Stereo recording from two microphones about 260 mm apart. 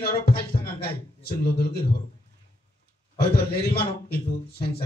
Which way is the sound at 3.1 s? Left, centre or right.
Left.